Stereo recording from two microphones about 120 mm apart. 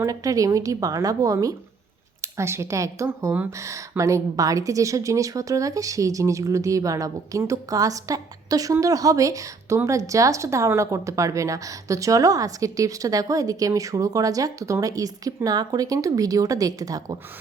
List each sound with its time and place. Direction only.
0.0 s speech: 30° right (ahead or behind)